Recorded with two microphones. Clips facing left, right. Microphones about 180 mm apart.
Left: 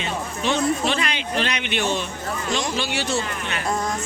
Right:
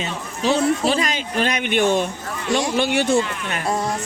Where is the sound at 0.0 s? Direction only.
35° right (ahead or behind); by 2.0 s 50° right (ahead or behind).